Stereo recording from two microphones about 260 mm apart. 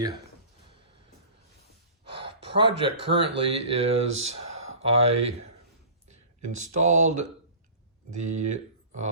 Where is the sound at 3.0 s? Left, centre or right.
Right.